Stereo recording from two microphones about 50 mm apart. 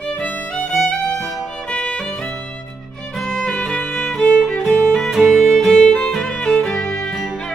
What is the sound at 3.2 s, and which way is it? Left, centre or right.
Music, centre.